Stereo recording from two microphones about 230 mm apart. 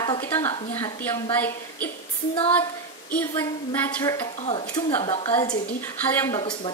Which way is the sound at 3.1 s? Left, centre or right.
Centre.